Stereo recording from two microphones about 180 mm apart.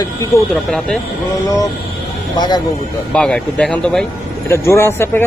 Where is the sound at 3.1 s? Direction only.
5° left (ahead or behind).